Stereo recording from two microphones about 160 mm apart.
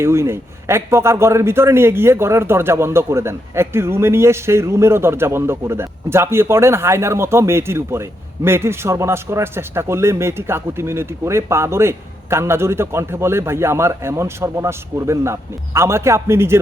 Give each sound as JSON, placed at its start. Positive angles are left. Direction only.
{"t": 0.0, "sound": "a man's voice", "side_deg": -15}